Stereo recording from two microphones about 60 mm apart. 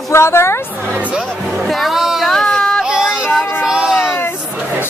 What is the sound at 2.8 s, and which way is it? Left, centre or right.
Child singing, centre.